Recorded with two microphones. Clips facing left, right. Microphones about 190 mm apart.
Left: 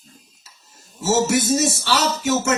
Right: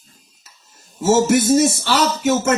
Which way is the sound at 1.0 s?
50° right (ahead or behind).